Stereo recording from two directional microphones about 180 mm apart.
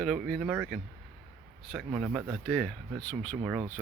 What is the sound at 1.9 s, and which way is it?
Speech, 10° right (ahead or behind).